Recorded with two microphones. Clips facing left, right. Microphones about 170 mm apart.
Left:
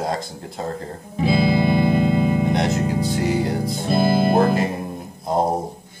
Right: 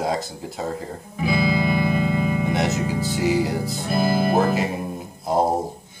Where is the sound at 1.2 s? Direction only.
25° left (ahead or behind).